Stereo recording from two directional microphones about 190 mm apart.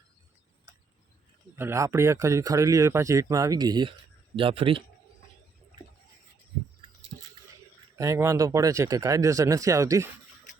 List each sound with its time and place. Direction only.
1.5 s speech: 15° right (ahead or behind); by 4.8 s 30° right (ahead or behind)
7.9 s speech: 15° right (ahead or behind)